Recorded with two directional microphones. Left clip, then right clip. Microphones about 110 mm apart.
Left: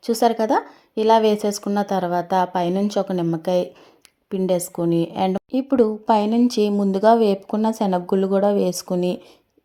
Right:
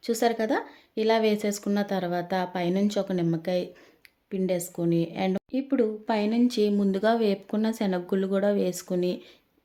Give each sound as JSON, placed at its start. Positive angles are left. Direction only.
{"t": 0.0, "sound": "a woman's voice", "side_deg": 25}